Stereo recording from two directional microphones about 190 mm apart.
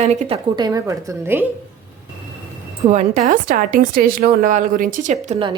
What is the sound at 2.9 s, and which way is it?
A woman's voice, 35° right (ahead or behind).